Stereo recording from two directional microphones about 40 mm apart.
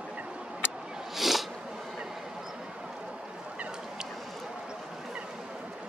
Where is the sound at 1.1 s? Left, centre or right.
Centre.